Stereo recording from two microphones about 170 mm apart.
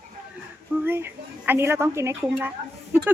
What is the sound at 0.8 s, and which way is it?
Speech, 10° right (ahead or behind).